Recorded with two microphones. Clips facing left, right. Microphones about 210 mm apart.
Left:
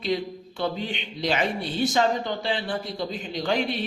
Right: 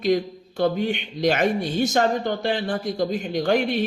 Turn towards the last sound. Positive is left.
turn(degrees=-45)  # may be behind; listen again after turning